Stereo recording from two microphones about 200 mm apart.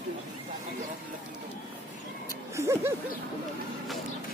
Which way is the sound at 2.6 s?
15° right (ahead or behind).